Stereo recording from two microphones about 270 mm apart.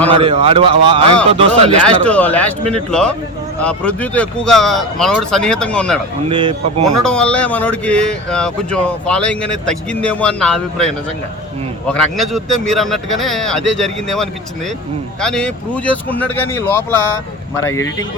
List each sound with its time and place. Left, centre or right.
0.1 s a man's voice: right
1.8 s speech: centre
6.2 s a man's voice: centre
6.9 s speech: centre